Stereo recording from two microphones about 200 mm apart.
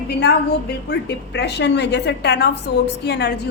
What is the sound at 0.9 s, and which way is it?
A woman's voice, 60° left (ahead or behind).